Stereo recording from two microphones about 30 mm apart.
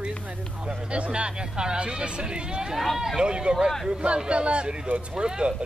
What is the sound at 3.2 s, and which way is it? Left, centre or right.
Speech, right.